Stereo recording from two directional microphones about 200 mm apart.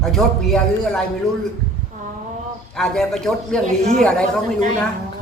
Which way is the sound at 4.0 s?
5° left (ahead or behind).